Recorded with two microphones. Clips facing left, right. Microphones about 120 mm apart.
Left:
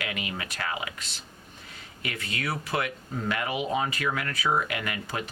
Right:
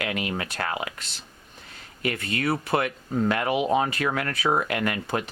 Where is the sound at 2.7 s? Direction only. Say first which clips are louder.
Right 6 dB; 40° right (ahead or behind).